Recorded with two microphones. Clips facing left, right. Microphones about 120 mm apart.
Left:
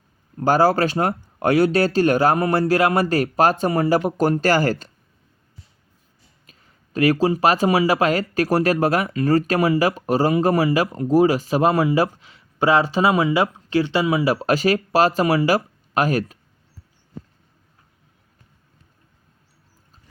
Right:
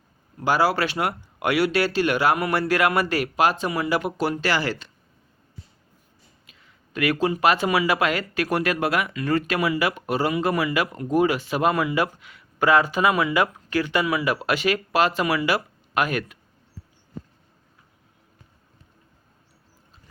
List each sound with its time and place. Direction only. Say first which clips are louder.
0.3 s speech: left 4 dB; 45° left (ahead or behind)
6.5 s speech: left 5 dB; 40° left (ahead or behind)